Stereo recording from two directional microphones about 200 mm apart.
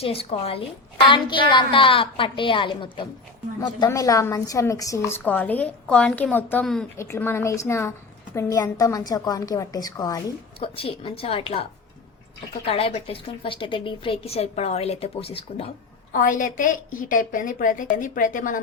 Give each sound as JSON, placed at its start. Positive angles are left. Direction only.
{"t": 0.0, "sound": "a woman's voice", "side_deg": 30}
{"t": 12.6, "sound": "a woman's voice", "side_deg": 30}
{"t": 16.1, "sound": "a woman's voice", "side_deg": 40}